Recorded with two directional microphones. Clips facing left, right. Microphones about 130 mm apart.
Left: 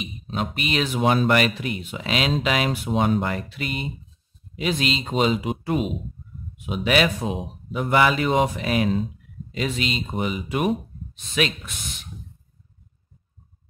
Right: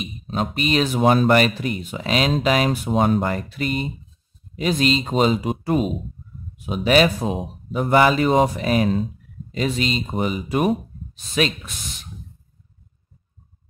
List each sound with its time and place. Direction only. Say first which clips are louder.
0.0 s speech: right 3 dB; 40° right (ahead or behind)